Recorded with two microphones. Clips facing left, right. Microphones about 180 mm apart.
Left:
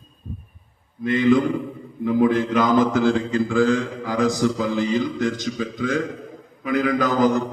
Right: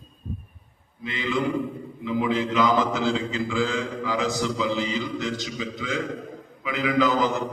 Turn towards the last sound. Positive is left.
turn(degrees=50)  # may be behind; listen again after turning